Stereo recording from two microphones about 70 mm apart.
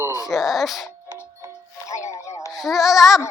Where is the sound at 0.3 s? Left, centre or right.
Centre.